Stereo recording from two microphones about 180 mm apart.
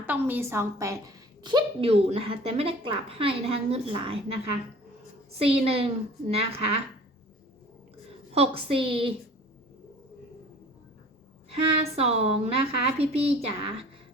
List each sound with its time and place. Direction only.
0.0 s a woman's voice: 10° right (ahead or behind); by 4.2 s 30° right (ahead or behind)
5.4 s a woman's voice: 30° right (ahead or behind)
8.3 s a woman's voice: 35° right (ahead or behind)
11.8 s a woman's voice: 35° right (ahead or behind)